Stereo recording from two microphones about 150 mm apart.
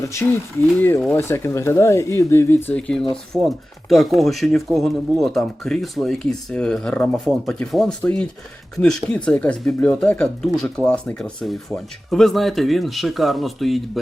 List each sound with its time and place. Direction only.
0.0 s speech: 20° left (ahead or behind); by 14.0 s centre (ahead or behind)